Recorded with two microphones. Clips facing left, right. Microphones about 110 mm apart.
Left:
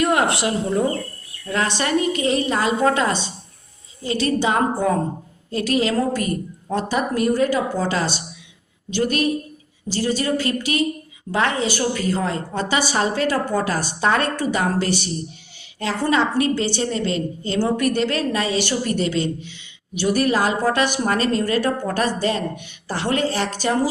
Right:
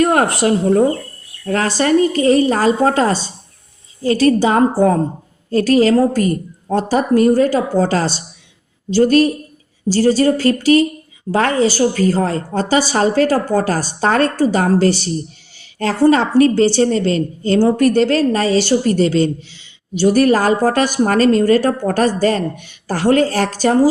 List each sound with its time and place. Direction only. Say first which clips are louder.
0.0 s a woman's voice: right 5 dB; 45° right (ahead or behind)